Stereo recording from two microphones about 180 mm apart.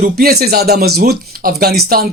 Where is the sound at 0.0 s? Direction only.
55° right (ahead or behind).